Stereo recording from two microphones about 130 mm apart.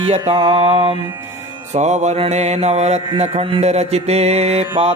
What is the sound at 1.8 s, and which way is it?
Music, 60° right (ahead or behind).